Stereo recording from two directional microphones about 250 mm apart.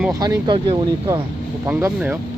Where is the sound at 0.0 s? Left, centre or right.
Centre.